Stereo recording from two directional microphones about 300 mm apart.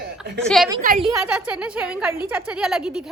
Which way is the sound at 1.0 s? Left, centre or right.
Centre.